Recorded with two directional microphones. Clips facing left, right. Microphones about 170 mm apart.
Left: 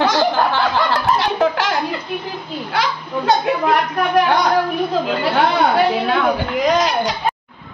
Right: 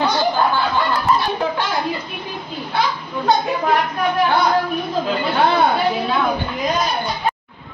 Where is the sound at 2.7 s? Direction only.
85° left.